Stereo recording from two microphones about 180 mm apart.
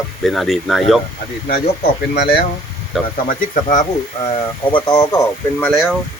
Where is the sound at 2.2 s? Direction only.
60° left (ahead or behind).